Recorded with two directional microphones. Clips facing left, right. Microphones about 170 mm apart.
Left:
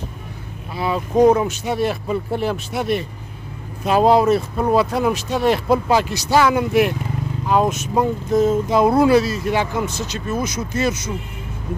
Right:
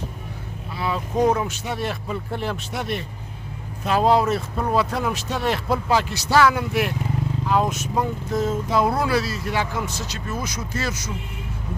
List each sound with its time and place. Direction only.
0.7 s speech: 15° left (ahead or behind)